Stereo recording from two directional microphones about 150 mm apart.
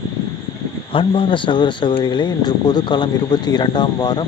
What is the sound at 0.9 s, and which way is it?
Speech, 35° left (ahead or behind).